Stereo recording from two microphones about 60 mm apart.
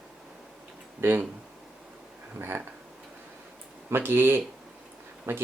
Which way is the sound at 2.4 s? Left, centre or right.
Right.